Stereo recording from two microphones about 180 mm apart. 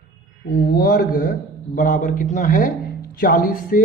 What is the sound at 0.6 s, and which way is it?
A man's voice, 60° left (ahead or behind).